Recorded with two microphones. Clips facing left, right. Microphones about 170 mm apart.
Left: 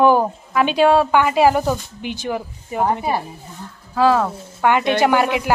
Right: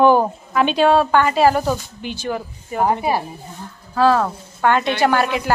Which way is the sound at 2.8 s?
10° right (ahead or behind).